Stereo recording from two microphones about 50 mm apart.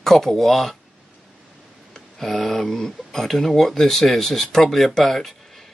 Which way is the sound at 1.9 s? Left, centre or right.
Centre.